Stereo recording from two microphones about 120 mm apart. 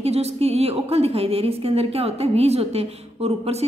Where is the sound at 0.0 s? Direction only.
60° right (ahead or behind).